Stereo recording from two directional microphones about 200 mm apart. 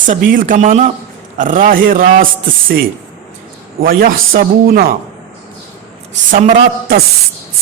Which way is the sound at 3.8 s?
45° right (ahead or behind).